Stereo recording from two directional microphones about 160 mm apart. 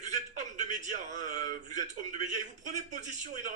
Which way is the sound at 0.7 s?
50° right (ahead or behind).